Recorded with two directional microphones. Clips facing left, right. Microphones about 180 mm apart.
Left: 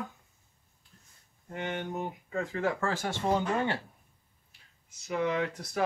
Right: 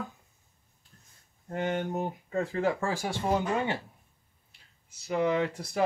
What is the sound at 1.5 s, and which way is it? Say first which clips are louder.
Speech: right 5 dB; 45° right (ahead or behind).